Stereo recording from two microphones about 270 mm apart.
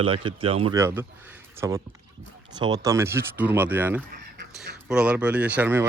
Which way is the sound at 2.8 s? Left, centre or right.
Centre.